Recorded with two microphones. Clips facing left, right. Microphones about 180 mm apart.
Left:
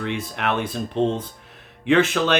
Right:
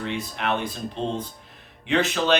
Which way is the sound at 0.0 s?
60° left (ahead or behind).